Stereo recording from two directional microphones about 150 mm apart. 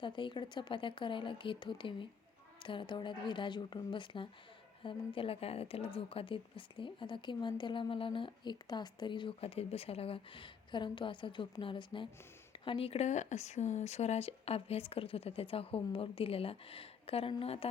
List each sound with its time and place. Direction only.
0.0 s a woman's voice: 35° left (ahead or behind)